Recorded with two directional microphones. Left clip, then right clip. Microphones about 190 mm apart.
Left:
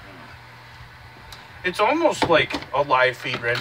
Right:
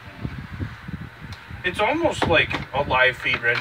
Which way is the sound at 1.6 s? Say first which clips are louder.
Left 2 dB; 15° left (ahead or behind).